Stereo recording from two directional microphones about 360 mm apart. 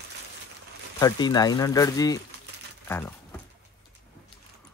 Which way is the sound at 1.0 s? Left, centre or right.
Centre.